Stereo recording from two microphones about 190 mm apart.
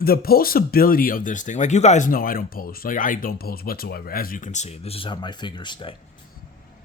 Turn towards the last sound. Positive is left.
turn(degrees=25)  # may be behind; listen again after turning